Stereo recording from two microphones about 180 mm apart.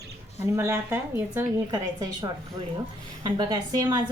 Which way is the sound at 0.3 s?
15° right (ahead or behind).